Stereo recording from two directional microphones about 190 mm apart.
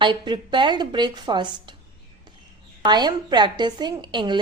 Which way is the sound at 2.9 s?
20° right (ahead or behind).